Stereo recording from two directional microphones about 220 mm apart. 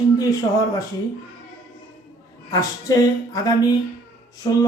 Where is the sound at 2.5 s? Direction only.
15° left (ahead or behind).